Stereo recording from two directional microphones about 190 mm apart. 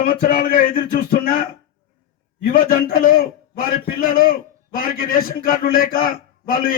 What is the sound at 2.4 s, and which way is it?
A man's voice, 50° left (ahead or behind).